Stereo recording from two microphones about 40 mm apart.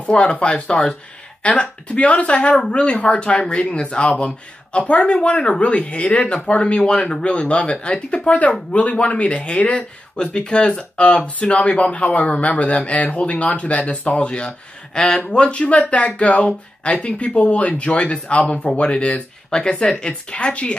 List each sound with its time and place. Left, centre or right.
0.0 s speech: left
1.4 s speech: left
4.7 s speech: left
5.0 s speech: left
6.8 s speech: centre